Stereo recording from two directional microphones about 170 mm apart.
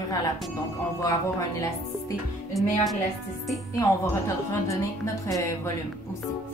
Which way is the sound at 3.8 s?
20° left (ahead or behind).